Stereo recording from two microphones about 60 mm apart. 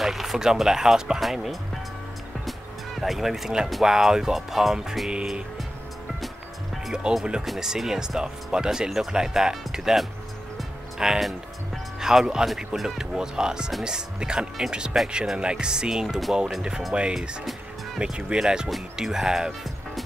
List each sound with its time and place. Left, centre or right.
0.0 s speech: centre
3.0 s speech: centre
6.9 s speech: centre